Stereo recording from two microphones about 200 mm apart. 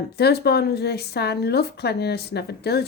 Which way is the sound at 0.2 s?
55° left (ahead or behind).